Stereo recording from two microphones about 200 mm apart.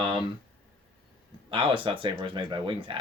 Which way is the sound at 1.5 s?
25° right (ahead or behind).